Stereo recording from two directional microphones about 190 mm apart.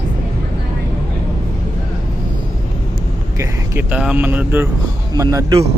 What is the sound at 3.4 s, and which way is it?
Speech, 10° right (ahead or behind).